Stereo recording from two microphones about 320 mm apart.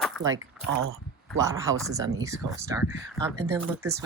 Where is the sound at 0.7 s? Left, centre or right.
Right.